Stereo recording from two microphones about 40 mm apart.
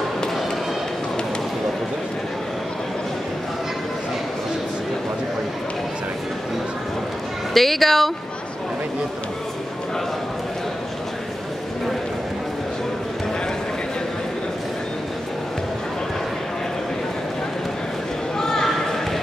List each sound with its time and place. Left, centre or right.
7.5 s speech: centre
18.4 s basketball bounce: centre